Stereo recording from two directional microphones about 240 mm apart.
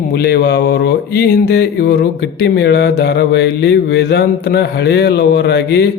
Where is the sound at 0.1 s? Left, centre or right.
Left.